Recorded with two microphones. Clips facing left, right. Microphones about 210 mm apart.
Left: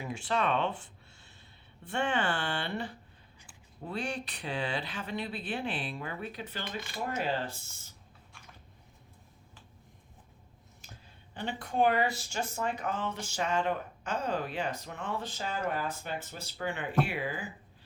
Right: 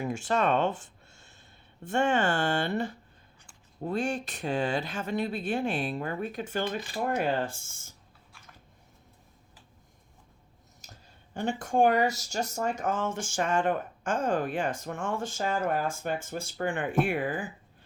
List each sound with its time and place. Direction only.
0.0 s speech: 45° right (ahead or behind)
10.8 s a sound: 40° right (ahead or behind)
11.3 s speech: 45° right (ahead or behind)